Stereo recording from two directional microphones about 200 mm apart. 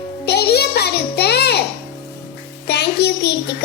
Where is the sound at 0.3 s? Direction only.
55° left (ahead or behind).